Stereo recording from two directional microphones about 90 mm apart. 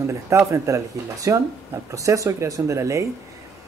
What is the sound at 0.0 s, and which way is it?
Speech, 35° right (ahead or behind).